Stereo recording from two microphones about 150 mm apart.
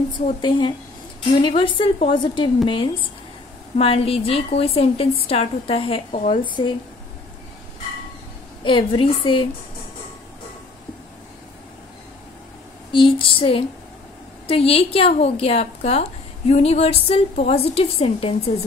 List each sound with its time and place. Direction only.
0.4 s a woman's voice: 35° left (ahead or behind)
8.6 s a woman's voice: 35° left (ahead or behind)
12.9 s a sound: 35° left (ahead or behind)
14.5 s a woman's voice: 40° left (ahead or behind)